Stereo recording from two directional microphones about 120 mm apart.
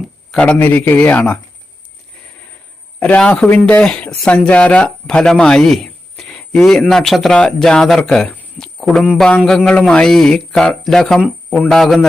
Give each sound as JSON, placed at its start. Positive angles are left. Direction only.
{"t": 0.3, "sound": "speech", "side_deg": 10}
{"t": 3.0, "sound": "a man's voice", "side_deg": 10}
{"t": 8.5, "sound": "a sound", "side_deg": 5}
{"t": 9.1, "sound": "a man's voice", "side_deg": 5}